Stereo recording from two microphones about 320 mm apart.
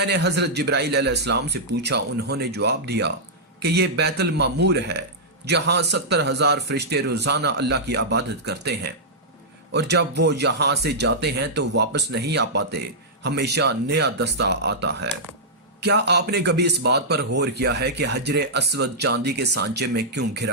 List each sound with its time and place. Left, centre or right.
0.0 s a man's voice: right